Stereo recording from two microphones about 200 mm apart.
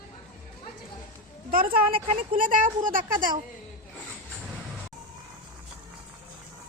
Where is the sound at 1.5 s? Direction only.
45° right (ahead or behind).